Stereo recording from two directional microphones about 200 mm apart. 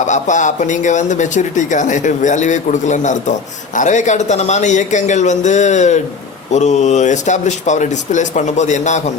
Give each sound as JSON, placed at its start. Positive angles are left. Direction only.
{"t": 0.0, "sound": "speech", "side_deg": 35}